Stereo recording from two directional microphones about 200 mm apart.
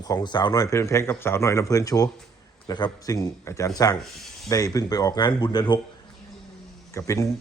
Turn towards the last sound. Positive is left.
turn(degrees=15)  # may be behind; listen again after turning